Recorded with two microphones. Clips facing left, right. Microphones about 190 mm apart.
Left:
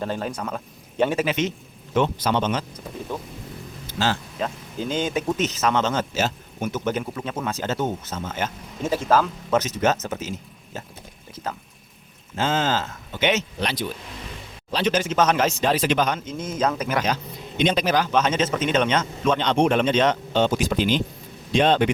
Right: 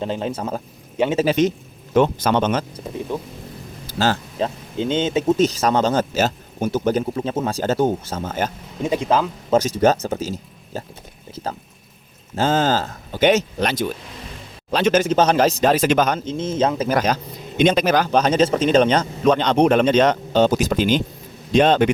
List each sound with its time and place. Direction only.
0.0 s a man's voice: 20° right (ahead or behind); by 2.6 s 50° right (ahead or behind)
3.9 s speech: 40° right (ahead or behind)
4.4 s speech: 30° right (ahead or behind)
5.4 s a man's voice: 35° right (ahead or behind)
8.8 s speech: 15° right (ahead or behind)
9.5 s speech: 30° right (ahead or behind)
12.4 s a man's voice: 40° right (ahead or behind)
15.1 s a man's voice: 35° right (ahead or behind)
16.2 s speech: 30° right (ahead or behind)
17.6 s a man's voice: 50° right (ahead or behind)